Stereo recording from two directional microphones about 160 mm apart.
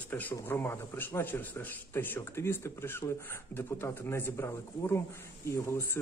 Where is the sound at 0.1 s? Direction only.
10° left (ahead or behind).